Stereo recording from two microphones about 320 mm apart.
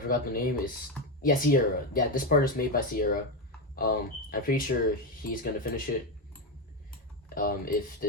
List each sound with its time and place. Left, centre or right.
0.1 s speech: left
7.3 s speech: left